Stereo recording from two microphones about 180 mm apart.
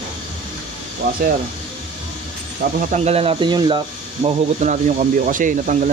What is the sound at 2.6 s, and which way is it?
Speech, 50° right (ahead or behind).